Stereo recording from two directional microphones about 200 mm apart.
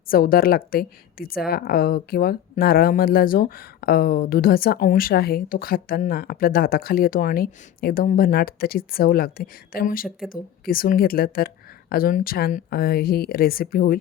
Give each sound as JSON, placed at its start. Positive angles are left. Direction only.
{"t": 0.1, "sound": "a woman's voice", "side_deg": 45}